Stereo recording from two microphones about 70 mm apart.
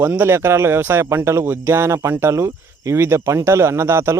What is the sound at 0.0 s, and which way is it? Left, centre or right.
Speech, right.